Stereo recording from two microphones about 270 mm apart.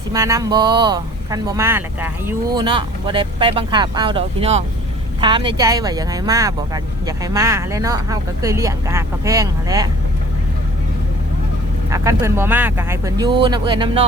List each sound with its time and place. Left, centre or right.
0.1 s speech: centre
11.9 s speech: centre